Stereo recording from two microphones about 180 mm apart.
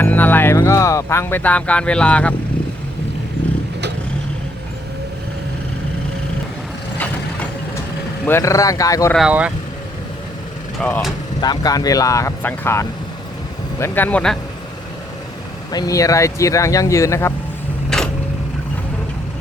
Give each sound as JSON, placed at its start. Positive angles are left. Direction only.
{"t": 0.0, "sound": "speech", "side_deg": 10}
{"t": 8.2, "sound": "speech", "side_deg": 15}
{"t": 9.1, "sound": "speech", "side_deg": -5}
{"t": 10.8, "sound": "speech", "side_deg": 5}
{"t": 11.3, "sound": "speech", "side_deg": 20}
{"t": 15.7, "sound": "speech", "side_deg": 20}
{"t": 17.9, "sound": "a sound", "side_deg": 5}